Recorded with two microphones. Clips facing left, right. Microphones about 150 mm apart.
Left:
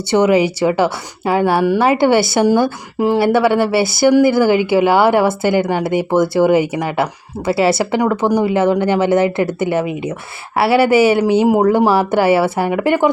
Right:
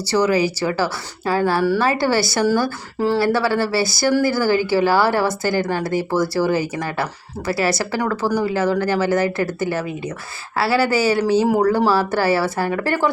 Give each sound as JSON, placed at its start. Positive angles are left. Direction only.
{"t": 0.1, "sound": "a woman's voice", "side_deg": 20}